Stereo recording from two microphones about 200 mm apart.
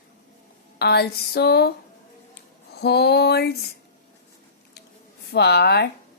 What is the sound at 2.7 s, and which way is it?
A woman's voice, 55° left (ahead or behind).